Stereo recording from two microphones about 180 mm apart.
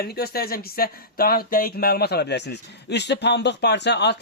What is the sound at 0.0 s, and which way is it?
Speech, 55° left (ahead or behind).